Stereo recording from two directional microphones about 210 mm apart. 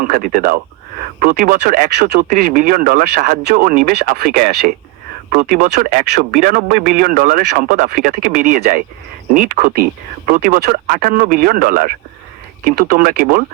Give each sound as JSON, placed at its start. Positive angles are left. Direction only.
{"t": 0.0, "sound": "speech", "side_deg": -40}